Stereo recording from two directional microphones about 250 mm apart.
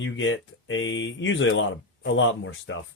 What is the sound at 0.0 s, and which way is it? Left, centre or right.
Speech, left.